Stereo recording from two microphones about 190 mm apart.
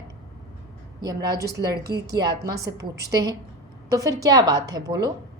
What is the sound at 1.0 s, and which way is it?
A woman's voice, 20° right (ahead or behind).